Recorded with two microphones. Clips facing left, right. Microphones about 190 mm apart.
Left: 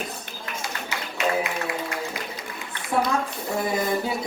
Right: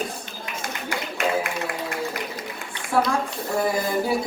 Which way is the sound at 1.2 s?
50° right (ahead or behind).